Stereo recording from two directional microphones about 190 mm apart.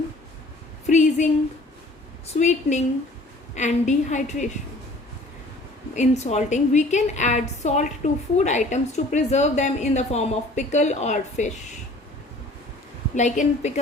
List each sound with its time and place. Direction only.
0.9 s a woman's voice: 40° left (ahead or behind)
5.9 s a woman's voice: 40° left (ahead or behind)
13.1 s a woman's voice: 40° left (ahead or behind)